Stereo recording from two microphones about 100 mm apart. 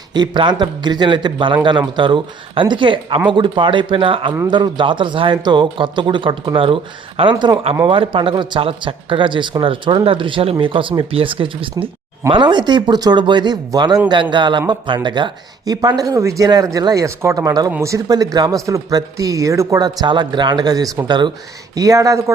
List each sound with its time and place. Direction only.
0.1 s speech: 50° right (ahead or behind)
4.4 s speech: 50° right (ahead or behind)
12.3 s speech: 50° right (ahead or behind)
21.1 s speech: 50° right (ahead or behind)
21.8 s speech: 35° right (ahead or behind)